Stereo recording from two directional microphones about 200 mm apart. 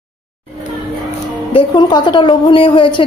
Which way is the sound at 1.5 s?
25° left (ahead or behind).